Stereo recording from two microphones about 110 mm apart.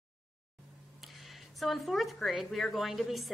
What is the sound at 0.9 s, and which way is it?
Speech, centre (ahead or behind).